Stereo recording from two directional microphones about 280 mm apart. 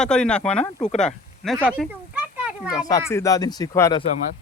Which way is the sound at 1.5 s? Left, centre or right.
Centre.